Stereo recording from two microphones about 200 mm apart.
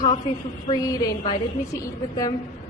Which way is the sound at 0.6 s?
20° left (ahead or behind).